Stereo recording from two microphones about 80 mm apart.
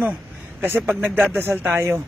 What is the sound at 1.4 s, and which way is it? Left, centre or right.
Speech, right.